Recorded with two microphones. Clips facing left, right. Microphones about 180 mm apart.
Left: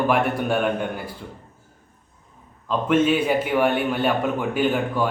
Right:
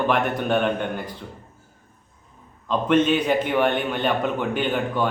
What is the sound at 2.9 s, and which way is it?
A man's voice, 5° left (ahead or behind).